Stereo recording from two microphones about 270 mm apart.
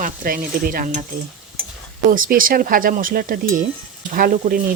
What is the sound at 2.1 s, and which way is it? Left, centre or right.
Stir, right.